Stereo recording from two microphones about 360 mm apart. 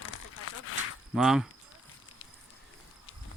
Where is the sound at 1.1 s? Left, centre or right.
Centre.